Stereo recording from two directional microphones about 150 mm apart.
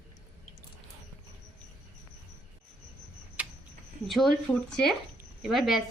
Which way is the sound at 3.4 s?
10° right (ahead or behind).